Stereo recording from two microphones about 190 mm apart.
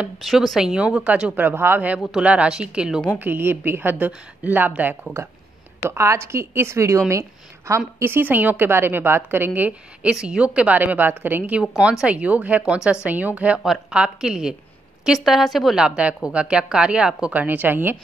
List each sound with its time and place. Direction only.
0.0 s a woman's voice: centre (ahead or behind)